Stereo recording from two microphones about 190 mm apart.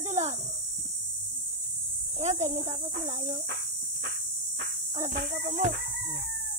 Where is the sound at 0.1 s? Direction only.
40° right (ahead or behind).